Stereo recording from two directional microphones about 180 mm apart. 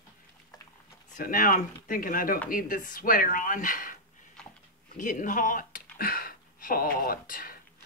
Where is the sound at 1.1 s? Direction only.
50° left (ahead or behind).